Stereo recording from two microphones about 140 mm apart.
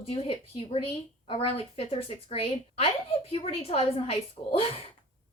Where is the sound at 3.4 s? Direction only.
45° left (ahead or behind).